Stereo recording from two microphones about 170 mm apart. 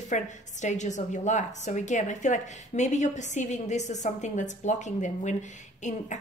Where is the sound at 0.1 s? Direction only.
45° left (ahead or behind).